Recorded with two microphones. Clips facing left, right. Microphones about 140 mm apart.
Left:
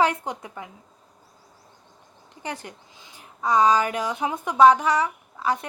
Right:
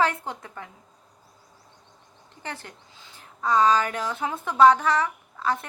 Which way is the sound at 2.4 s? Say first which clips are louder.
Left 4 dB; 15° left (ahead or behind).